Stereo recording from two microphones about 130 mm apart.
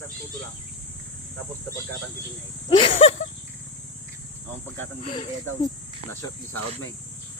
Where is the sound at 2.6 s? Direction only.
45° left (ahead or behind).